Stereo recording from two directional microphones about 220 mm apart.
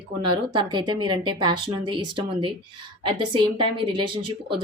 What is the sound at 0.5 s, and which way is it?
A woman's voice, 20° right (ahead or behind).